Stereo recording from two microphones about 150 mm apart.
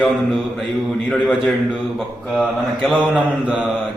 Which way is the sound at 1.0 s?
Centre (ahead or behind).